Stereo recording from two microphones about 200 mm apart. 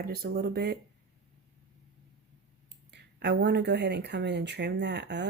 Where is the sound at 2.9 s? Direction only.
60° right (ahead or behind).